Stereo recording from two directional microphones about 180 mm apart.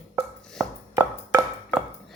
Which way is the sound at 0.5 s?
20° right (ahead or behind).